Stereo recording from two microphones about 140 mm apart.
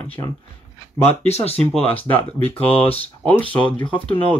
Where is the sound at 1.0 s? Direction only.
50° left (ahead or behind).